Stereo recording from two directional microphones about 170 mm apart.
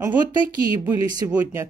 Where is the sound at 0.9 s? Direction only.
10° right (ahead or behind).